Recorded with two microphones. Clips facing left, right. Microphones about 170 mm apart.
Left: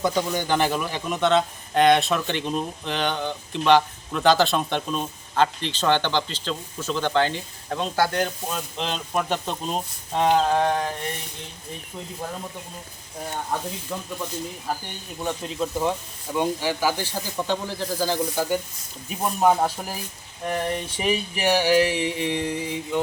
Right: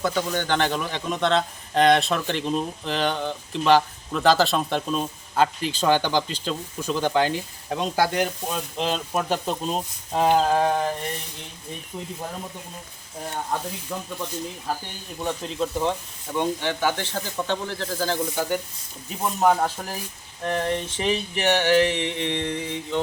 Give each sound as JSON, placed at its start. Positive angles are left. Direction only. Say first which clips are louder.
{"t": 0.0, "sound": "a man's voice", "louder": "left 1 dB", "side_deg": 15}
{"t": 13.9, "sound": "a man's voice", "louder": "even", "side_deg": 0}
{"t": 15.2, "sound": "speech", "louder": "right 1 dB", "side_deg": 0}